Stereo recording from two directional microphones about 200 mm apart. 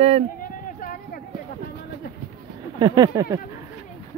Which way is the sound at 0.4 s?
45° left (ahead or behind).